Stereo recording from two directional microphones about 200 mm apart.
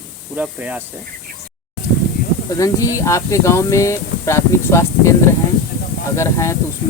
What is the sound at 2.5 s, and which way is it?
Speech, 15° left (ahead or behind).